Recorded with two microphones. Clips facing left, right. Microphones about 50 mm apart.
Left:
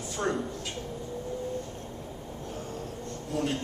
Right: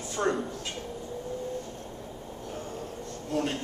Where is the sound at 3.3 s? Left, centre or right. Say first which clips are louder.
Right 1 dB; centre.